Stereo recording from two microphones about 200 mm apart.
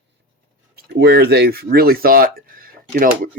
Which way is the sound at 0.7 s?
55° right (ahead or behind).